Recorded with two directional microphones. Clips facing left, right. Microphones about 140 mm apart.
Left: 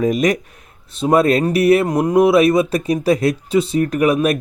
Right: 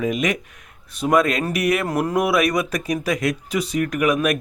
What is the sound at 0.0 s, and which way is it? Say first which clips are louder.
Speech: left 6 dB; 40° left (ahead or behind).